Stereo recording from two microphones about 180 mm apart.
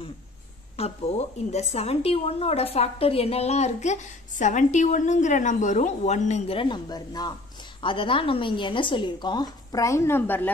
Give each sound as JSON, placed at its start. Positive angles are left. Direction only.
{"t": 0.7, "sound": "a woman's voice", "side_deg": 35}